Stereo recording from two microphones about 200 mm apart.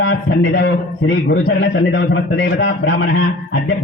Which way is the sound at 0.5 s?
65° left (ahead or behind).